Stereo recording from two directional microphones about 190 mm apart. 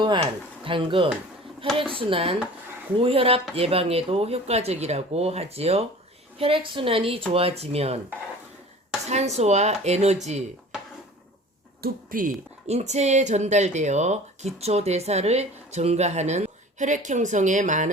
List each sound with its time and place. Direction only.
0.0 s speech: 25° right (ahead or behind)
9.0 s speech: 35° right (ahead or behind)
11.8 s speech: 45° right (ahead or behind)